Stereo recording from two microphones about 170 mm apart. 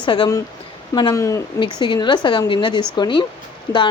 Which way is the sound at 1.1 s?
15° left (ahead or behind).